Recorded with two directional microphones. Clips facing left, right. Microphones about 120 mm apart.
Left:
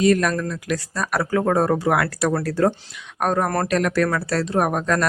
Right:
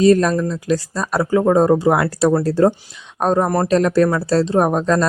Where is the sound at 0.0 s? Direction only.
30° right (ahead or behind).